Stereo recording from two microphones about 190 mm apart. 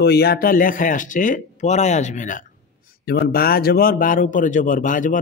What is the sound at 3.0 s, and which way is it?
A man's voice, 55° left (ahead or behind).